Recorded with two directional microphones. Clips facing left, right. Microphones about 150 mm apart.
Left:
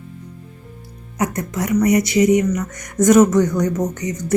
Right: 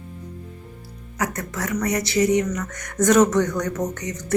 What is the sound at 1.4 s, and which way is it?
Speech, 15° left (ahead or behind).